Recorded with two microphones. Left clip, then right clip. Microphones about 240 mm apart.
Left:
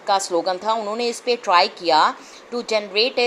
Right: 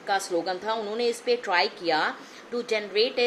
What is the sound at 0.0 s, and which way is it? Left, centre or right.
A woman's voice, centre.